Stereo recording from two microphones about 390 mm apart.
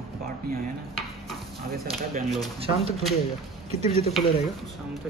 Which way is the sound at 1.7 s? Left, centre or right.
Right.